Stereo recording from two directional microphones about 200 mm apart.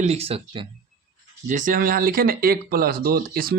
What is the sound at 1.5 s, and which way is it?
Speech, 40° right (ahead or behind).